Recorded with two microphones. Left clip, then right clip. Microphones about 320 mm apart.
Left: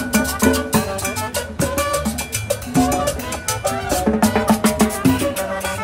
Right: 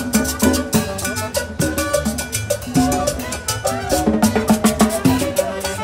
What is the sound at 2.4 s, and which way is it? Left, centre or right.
Music, left.